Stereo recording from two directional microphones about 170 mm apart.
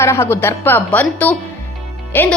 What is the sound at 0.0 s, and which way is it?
A woman's voice, 15° left (ahead or behind).